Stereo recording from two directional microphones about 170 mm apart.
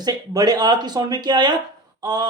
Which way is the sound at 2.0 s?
25° right (ahead or behind).